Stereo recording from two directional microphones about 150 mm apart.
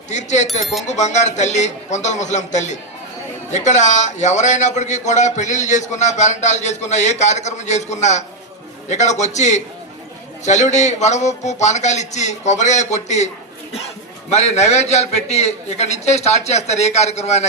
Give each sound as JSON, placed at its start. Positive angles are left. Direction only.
{"t": 0.1, "sound": "a man's voice", "side_deg": 50}
{"t": 0.6, "sound": "speech", "side_deg": 0}
{"t": 0.9, "sound": "a man's voice", "side_deg": 50}